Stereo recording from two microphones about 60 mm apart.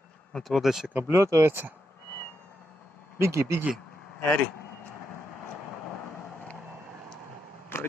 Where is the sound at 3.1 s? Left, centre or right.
Right.